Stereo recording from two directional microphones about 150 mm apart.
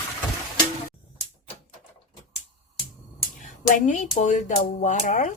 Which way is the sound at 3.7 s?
55° left (ahead or behind).